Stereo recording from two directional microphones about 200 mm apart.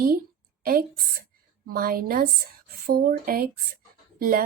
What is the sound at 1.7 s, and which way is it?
A woman's voice, 45° right (ahead or behind).